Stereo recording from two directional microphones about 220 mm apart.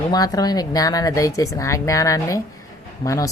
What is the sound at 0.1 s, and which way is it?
Speech, 15° left (ahead or behind).